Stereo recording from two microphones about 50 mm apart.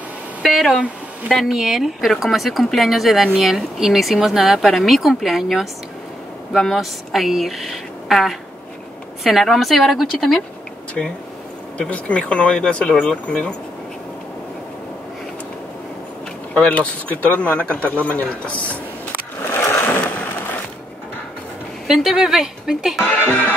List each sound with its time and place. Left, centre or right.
0.4 s speech: centre
11.0 s speech: centre
16.5 s speech: left
19.4 s sewing machine: left
19.9 s a sound: left
21.8 s a woman's voice: centre
23.2 s music: left